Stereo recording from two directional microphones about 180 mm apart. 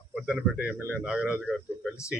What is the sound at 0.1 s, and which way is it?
A man's voice, 5° right (ahead or behind).